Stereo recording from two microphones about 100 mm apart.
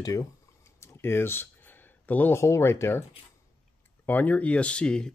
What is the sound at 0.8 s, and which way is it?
Speech, 25° left (ahead or behind).